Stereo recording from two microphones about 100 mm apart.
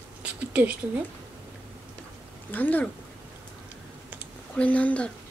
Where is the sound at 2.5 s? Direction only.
15° left (ahead or behind).